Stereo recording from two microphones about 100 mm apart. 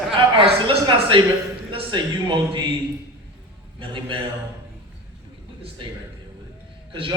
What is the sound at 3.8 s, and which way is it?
Speech, 60° right (ahead or behind).